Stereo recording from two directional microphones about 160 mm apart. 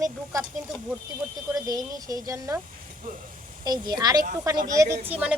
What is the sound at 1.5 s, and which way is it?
Speech, 20° right (ahead or behind).